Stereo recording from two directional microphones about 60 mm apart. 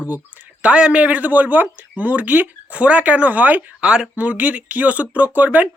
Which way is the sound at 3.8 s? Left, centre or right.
Centre.